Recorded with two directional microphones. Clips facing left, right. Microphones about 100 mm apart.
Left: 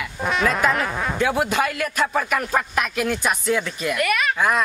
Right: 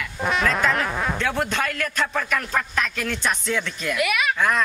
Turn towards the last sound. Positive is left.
turn(degrees=5)  # may be behind; listen again after turning